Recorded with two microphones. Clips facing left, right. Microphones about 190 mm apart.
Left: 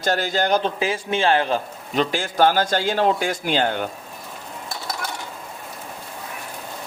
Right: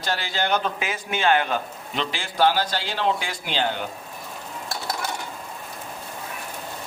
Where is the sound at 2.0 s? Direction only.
45° left (ahead or behind).